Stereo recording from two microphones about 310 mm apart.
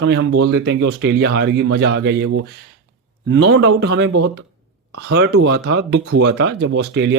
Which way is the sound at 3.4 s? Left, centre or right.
Right.